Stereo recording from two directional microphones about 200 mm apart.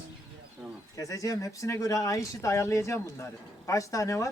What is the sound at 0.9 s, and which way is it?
Speech, 15° left (ahead or behind).